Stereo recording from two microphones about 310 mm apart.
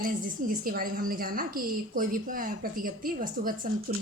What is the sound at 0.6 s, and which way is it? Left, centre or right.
A woman's voice, right.